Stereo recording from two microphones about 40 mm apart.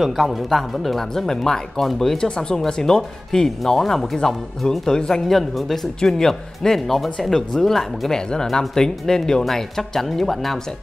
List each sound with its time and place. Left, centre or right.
0.0 s speech: centre
4.8 s speech: centre